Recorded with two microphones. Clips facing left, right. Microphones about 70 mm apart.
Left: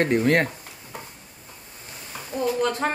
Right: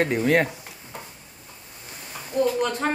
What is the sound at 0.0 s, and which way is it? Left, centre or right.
Speech, centre.